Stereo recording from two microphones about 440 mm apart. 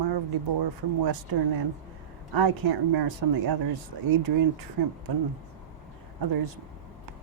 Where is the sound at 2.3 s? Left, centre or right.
Right.